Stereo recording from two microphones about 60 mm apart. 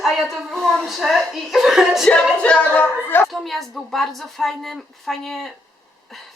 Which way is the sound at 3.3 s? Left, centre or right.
Centre.